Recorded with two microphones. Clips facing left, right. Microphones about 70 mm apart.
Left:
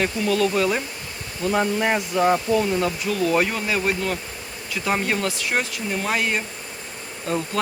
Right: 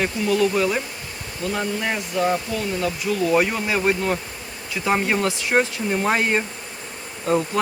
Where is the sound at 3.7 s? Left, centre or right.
Right.